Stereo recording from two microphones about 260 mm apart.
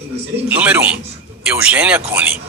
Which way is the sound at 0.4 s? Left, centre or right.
Centre.